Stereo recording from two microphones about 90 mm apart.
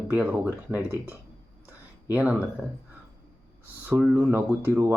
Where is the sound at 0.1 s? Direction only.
15° right (ahead or behind).